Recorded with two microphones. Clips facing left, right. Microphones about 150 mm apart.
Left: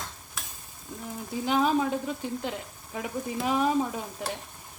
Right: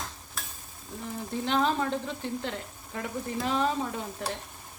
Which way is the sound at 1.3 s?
10° left (ahead or behind).